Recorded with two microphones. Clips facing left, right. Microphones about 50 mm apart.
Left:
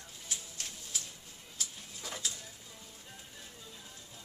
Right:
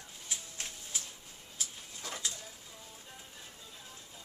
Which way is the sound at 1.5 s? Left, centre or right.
Centre.